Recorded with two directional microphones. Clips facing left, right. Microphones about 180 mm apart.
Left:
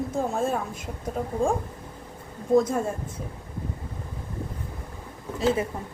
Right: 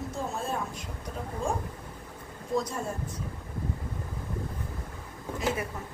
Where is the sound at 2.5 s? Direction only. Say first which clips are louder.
Left 10 dB; 50° left (ahead or behind).